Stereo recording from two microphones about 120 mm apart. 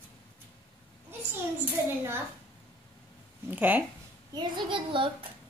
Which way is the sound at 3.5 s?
15° right (ahead or behind).